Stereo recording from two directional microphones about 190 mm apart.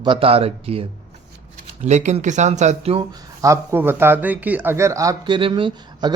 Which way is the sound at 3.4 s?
15° right (ahead or behind).